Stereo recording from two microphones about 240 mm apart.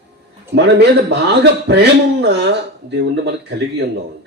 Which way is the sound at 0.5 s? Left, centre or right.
Right.